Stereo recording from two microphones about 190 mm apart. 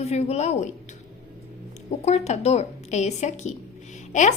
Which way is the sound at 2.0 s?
35° left (ahead or behind).